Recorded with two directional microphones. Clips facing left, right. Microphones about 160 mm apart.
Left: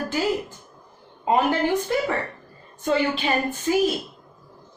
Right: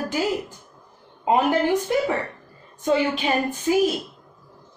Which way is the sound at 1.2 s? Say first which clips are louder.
Right 1 dB; 15° right (ahead or behind).